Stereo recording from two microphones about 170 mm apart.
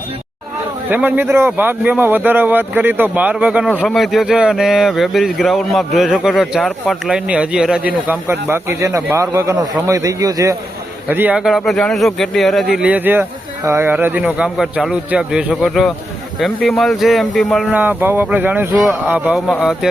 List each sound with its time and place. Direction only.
0.9 s a man's voice: 10° right (ahead or behind)
7.1 s a man's voice: 5° right (ahead or behind)
17.7 s a man's voice: 10° right (ahead or behind)